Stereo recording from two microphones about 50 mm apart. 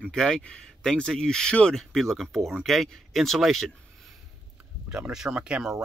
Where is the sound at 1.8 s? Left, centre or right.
Centre.